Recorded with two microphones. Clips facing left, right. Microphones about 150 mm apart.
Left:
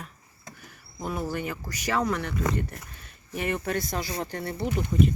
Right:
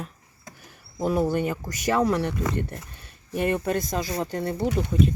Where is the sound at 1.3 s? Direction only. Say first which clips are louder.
Right 6 dB; 25° right (ahead or behind).